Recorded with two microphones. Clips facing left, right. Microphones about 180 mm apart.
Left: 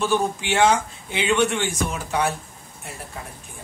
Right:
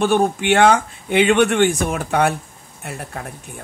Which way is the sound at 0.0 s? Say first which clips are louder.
Right 6 dB; 60° right (ahead or behind).